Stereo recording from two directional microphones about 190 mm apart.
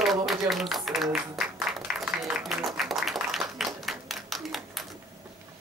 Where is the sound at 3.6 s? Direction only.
Centre (ahead or behind).